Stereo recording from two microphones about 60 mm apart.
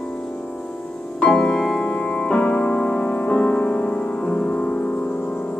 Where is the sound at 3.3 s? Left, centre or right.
Centre.